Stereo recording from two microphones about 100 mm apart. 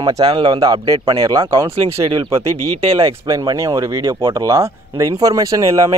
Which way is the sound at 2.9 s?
35° right (ahead or behind).